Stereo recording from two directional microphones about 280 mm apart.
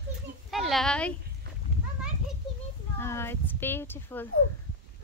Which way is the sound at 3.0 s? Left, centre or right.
Centre.